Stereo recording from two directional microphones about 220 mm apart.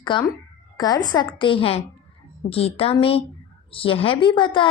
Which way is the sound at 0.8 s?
20° left (ahead or behind).